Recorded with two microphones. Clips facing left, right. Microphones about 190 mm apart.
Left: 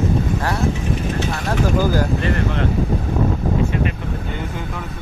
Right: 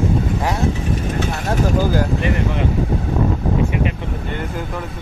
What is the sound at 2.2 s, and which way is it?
Speech, 15° right (ahead or behind).